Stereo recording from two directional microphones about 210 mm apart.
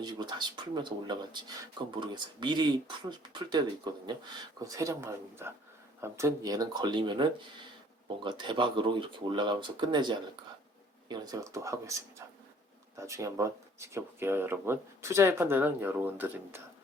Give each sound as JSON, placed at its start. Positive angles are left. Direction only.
{"t": 0.0, "sound": "speech", "side_deg": -20}
{"t": 4.6, "sound": "speech", "side_deg": -15}